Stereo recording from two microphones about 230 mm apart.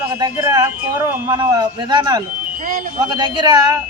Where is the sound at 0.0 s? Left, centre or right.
Centre.